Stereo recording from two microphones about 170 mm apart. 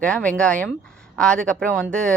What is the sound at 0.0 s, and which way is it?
Speech, 5° left (ahead or behind).